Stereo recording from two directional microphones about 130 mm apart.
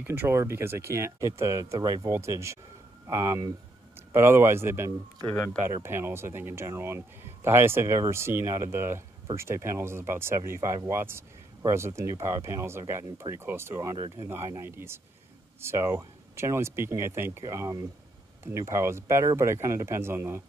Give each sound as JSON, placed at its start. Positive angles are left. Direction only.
{"t": 0.0, "sound": "speech", "side_deg": -15}
{"t": 5.3, "sound": "speech", "side_deg": 10}
{"t": 5.6, "sound": "speech", "side_deg": -20}